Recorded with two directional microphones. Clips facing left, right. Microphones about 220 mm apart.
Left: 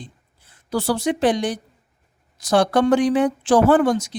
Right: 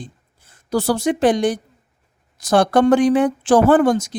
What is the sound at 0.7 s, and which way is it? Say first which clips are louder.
Speech: right 3 dB; 45° right (ahead or behind).